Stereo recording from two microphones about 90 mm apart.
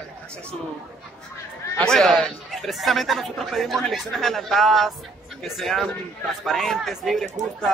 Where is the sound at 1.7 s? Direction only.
5° left (ahead or behind).